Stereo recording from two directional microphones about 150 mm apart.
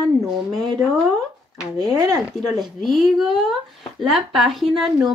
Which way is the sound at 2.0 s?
25° right (ahead or behind).